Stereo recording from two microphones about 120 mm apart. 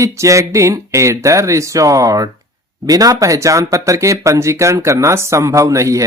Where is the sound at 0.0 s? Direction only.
25° right (ahead or behind).